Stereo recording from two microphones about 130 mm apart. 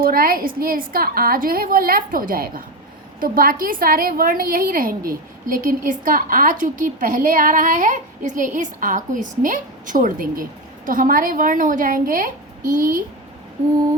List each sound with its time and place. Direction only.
0.0 s a woman's voice: 90° right